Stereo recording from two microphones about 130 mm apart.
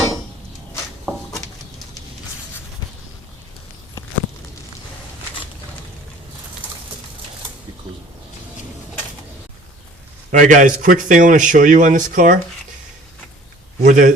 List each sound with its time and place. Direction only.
10.3 s a man's voice: 85° right
13.8 s a man's voice: 85° right